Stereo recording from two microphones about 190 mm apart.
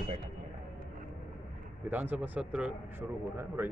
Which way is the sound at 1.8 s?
10° right (ahead or behind).